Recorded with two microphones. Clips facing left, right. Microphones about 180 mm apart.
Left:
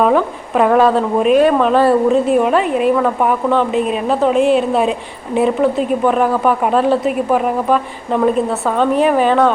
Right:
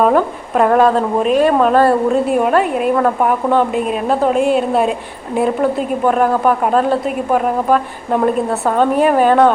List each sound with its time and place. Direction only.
0.0 s a woman's voice: centre (ahead or behind)